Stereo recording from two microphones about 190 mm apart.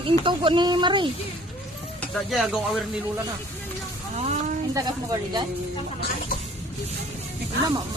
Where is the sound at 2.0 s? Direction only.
Centre (ahead or behind).